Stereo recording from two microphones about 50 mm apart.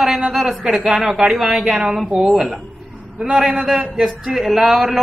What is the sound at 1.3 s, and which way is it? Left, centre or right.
Speech, centre.